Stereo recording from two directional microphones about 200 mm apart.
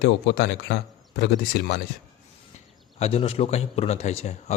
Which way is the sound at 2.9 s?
30° left (ahead or behind).